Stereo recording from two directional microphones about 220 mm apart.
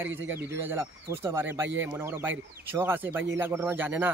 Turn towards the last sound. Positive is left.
turn(degrees=-10)  # may be behind; listen again after turning